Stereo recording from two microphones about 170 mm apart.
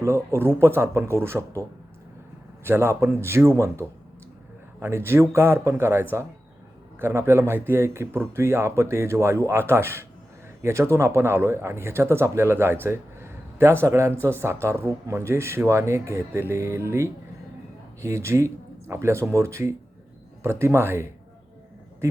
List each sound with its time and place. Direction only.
0.0 s a man's voice: 15° right (ahead or behind)
2.6 s a man's voice: 15° right (ahead or behind)